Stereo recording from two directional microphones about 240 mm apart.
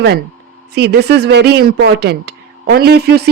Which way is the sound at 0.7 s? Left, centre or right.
Right.